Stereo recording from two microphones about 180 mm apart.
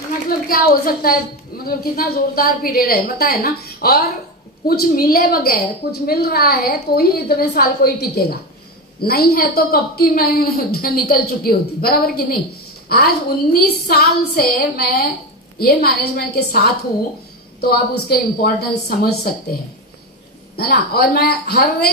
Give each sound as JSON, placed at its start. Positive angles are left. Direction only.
{"t": 0.5, "sound": "a woman's voice", "side_deg": 55}
{"t": 20.5, "sound": "a woman's voice", "side_deg": 60}